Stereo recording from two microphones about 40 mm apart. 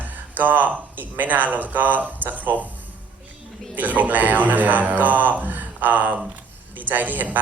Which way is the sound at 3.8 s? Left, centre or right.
Right.